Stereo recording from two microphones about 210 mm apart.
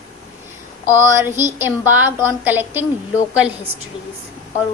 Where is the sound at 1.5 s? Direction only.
10° right (ahead or behind).